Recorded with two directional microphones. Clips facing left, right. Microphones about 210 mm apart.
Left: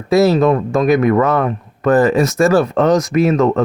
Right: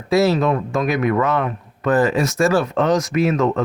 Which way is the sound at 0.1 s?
40° left (ahead or behind).